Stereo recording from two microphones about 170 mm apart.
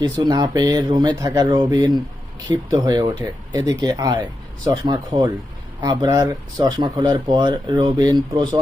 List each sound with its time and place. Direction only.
0.0 s speech: 25° right (ahead or behind)